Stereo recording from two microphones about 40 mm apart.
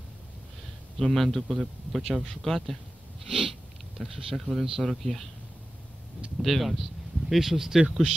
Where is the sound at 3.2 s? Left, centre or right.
Centre.